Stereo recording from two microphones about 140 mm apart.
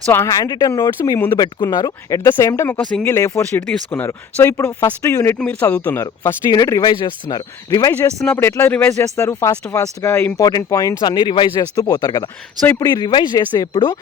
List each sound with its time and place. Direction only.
0.0 s speech: 15° left (ahead or behind)